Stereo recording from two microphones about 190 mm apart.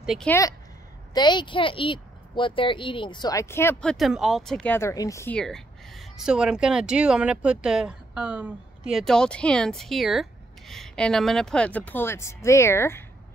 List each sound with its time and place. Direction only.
0.0 s speech: centre (ahead or behind)
0.3 s speech: 15° left (ahead or behind)
3.9 s speech: centre (ahead or behind); by 5.4 s 15° left (ahead or behind)
5.4 s speech: centre (ahead or behind)